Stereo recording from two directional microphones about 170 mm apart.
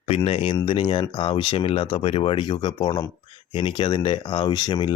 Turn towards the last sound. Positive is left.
turn(degrees=25)  # may be behind; listen again after turning